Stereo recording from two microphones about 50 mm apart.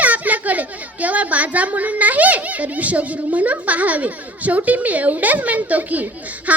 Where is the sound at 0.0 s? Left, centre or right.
Right.